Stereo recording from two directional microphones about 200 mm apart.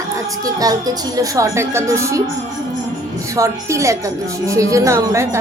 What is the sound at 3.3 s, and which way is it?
A woman's voice, 15° right (ahead or behind).